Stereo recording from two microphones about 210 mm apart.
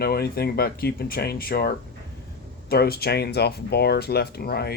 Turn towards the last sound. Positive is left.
turn(degrees=50)  # may be behind; listen again after turning